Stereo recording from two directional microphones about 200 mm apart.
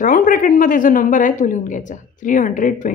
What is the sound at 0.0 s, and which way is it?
A woman's voice, 40° left (ahead or behind).